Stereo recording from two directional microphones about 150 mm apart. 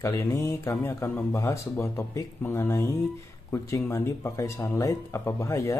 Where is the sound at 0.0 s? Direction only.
20° left (ahead or behind).